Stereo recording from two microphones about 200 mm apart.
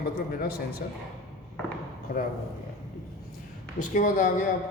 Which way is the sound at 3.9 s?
40° left (ahead or behind).